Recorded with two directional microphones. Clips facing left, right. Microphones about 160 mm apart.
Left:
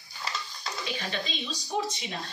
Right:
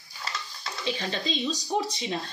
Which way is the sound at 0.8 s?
35° right (ahead or behind).